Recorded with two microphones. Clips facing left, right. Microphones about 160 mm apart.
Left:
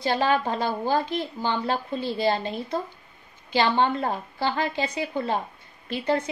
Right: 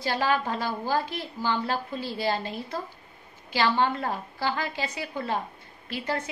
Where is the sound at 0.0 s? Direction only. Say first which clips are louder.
Left 3 dB; 25° left (ahead or behind).